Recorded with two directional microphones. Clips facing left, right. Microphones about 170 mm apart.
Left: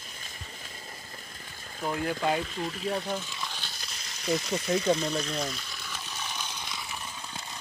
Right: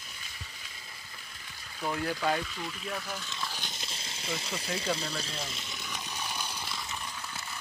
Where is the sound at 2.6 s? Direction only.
40° left (ahead or behind).